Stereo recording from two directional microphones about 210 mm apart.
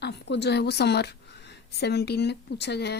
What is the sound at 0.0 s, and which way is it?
A woman's voice, 55° left (ahead or behind).